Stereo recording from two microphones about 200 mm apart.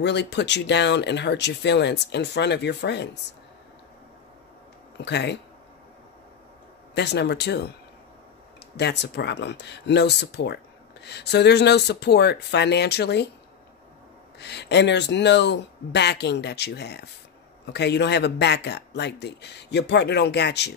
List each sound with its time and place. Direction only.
0.0 s speech: 60° left (ahead or behind)
5.0 s speech: 60° left (ahead or behind)
7.0 s speech: 60° left (ahead or behind)
8.7 s speech: 55° left (ahead or behind)
14.4 s speech: 55° left (ahead or behind)